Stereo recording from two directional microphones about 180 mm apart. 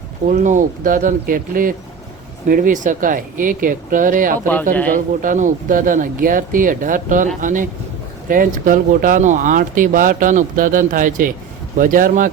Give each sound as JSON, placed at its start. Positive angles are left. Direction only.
{"t": 0.3, "sound": "speech", "side_deg": -45}
{"t": 4.4, "sound": "speech", "side_deg": 10}
{"t": 4.9, "sound": "speech", "side_deg": -45}